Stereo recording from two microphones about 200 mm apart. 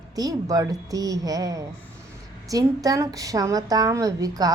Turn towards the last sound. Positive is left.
turn(degrees=-15)  # may be behind; listen again after turning